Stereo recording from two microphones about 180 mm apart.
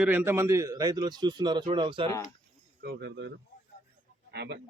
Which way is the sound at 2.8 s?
70° right (ahead or behind).